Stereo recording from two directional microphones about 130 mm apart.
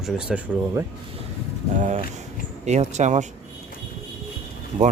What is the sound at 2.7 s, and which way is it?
Speech, 60° right (ahead or behind).